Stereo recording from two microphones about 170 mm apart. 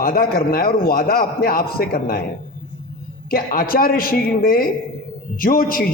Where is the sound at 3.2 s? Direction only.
60° left (ahead or behind).